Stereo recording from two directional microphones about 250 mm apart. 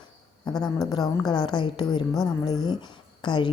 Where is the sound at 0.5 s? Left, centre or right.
Centre.